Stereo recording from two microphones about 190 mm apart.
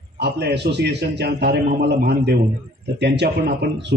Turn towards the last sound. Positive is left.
turn(degrees=-65)  # may be behind; listen again after turning